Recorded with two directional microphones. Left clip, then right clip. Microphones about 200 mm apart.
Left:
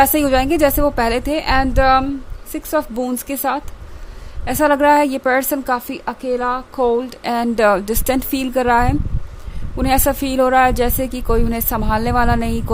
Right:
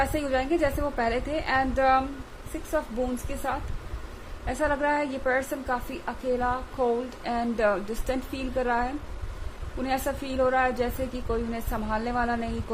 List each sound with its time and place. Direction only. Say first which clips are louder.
0.0 s a woman's voice: left 12 dB; 55° left (ahead or behind)